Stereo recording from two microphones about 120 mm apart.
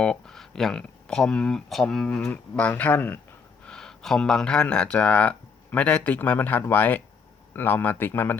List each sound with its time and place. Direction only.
0.0 s a man's voice: 5° left (ahead or behind)